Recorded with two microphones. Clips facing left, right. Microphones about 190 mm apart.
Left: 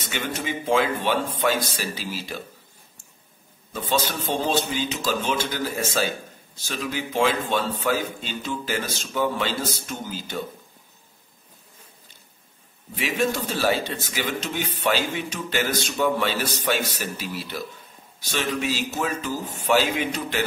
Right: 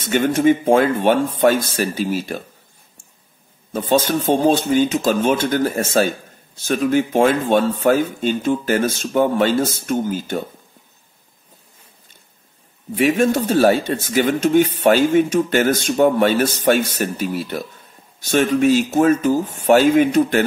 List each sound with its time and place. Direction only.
0.0 s speech: 50° right (ahead or behind)
3.7 s speech: 50° right (ahead or behind)
12.9 s speech: 50° right (ahead or behind)